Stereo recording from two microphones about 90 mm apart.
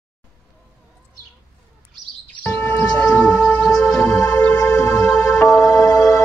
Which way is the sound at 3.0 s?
15° left (ahead or behind).